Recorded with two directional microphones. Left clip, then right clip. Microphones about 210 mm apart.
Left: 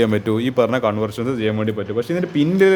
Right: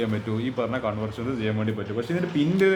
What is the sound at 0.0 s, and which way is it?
A man's voice, 55° left (ahead or behind).